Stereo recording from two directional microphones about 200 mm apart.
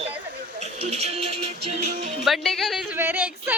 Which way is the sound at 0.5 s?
35° right (ahead or behind).